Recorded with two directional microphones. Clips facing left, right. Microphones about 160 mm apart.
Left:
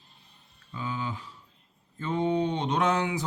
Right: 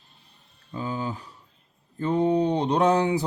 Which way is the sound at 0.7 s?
40° right (ahead or behind).